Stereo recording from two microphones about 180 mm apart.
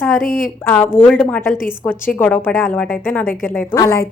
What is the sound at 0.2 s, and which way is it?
Speech, 50° left (ahead or behind).